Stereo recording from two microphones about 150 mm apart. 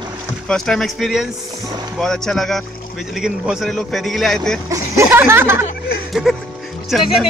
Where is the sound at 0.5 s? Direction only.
Centre (ahead or behind).